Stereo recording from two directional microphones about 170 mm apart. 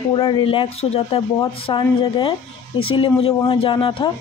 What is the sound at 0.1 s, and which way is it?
A woman's voice, 30° left (ahead or behind).